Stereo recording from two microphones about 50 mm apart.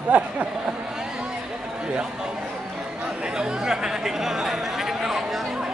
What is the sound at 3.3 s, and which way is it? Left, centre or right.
Chatter, centre.